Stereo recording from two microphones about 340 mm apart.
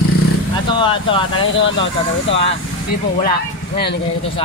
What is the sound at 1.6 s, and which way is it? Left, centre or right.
Speech, left.